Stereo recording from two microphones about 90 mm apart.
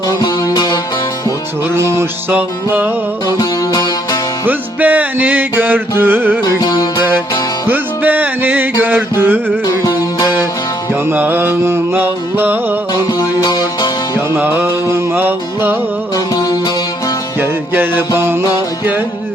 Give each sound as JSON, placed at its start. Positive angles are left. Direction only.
{"t": 0.2, "sound": "music", "side_deg": 45}
{"t": 1.7, "sound": "music", "side_deg": -30}
{"t": 2.3, "sound": "music", "side_deg": -20}
{"t": 3.2, "sound": "music", "side_deg": 45}
{"t": 4.4, "sound": "music", "side_deg": -20}
{"t": 6.4, "sound": "music", "side_deg": 45}
{"t": 7.7, "sound": "music", "side_deg": -20}
{"t": 9.6, "sound": "music", "side_deg": 45}
{"t": 11.1, "sound": "music", "side_deg": -20}
{"t": 12.9, "sound": "music", "side_deg": 50}
{"t": 14.3, "sound": "music", "side_deg": -20}
{"t": 16.1, "sound": "music", "side_deg": 40}
{"t": 17.4, "sound": "music", "side_deg": -25}